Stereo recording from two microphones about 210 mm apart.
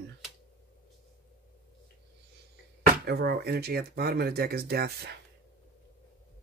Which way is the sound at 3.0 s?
50° right (ahead or behind).